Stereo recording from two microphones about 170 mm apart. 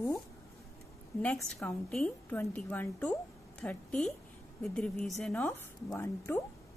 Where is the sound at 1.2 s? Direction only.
Centre (ahead or behind).